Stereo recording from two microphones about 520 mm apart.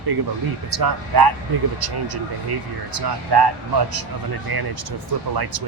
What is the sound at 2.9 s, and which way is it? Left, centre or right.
Speech, right.